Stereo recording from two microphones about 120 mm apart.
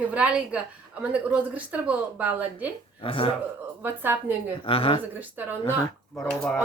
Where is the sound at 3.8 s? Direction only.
15° right (ahead or behind).